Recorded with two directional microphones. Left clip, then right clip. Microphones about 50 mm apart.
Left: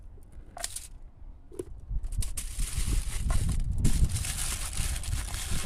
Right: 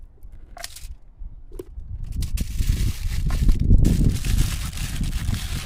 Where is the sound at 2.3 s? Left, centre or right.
Right.